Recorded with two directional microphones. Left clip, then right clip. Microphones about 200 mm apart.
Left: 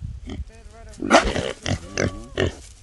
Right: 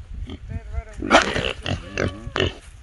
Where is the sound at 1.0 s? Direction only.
25° left (ahead or behind).